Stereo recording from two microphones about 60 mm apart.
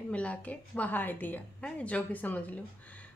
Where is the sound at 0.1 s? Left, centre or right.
Left.